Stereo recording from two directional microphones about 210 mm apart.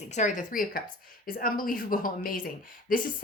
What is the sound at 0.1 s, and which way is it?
Speech, 35° left (ahead or behind).